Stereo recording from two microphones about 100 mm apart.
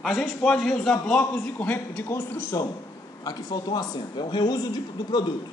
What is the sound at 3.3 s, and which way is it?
A man's voice, 40° left (ahead or behind).